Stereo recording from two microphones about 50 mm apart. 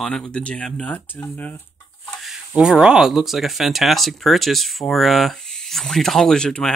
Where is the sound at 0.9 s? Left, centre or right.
Left.